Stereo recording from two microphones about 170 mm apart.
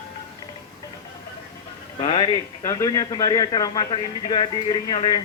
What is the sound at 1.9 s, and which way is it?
Music, 30° left (ahead or behind).